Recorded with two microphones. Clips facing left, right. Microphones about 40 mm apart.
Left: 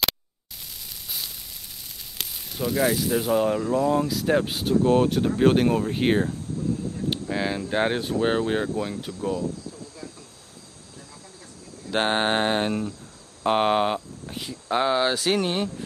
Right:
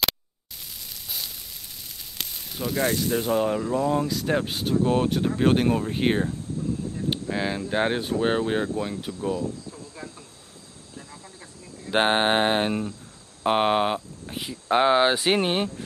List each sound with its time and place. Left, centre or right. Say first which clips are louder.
2.1 s speech: left 2 dB; centre
11.8 s speech: right 2 dB; centre